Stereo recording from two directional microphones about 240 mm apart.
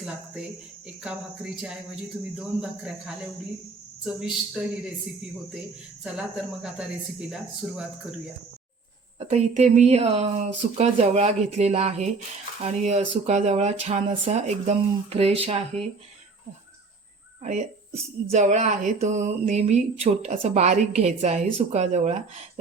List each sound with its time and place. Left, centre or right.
0.0 s speech: centre
2.3 s speech: centre
6.0 s speech: centre
9.1 s speech: right
17.4 s speech: right